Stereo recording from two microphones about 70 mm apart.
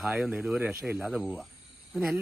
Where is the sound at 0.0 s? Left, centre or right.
Centre.